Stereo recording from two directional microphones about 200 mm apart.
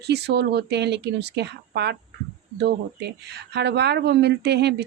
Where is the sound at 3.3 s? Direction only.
55° right (ahead or behind).